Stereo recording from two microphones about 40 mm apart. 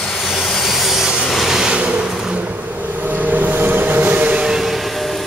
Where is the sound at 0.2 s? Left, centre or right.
Centre.